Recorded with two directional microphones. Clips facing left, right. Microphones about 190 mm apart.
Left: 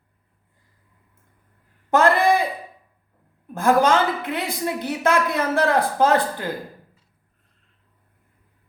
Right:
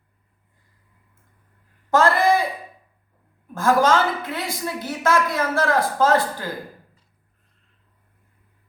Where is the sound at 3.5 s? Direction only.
15° left (ahead or behind).